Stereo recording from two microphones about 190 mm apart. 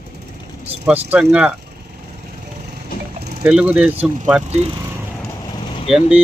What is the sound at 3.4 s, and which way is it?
Speech, 5° right (ahead or behind).